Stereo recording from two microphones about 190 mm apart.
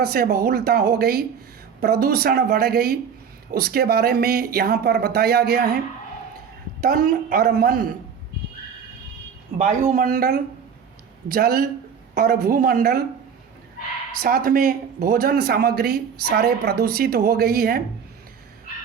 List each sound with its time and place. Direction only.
0.0 s speech: 55° right (ahead or behind)
6.8 s speech: 50° right (ahead or behind)
9.6 s speech: 40° right (ahead or behind)
14.2 s speech: 50° right (ahead or behind)